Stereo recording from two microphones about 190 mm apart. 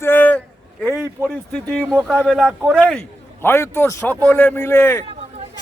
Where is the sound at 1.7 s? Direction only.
5° left (ahead or behind).